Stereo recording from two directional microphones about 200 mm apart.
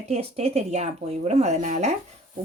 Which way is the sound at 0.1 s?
30° right (ahead or behind).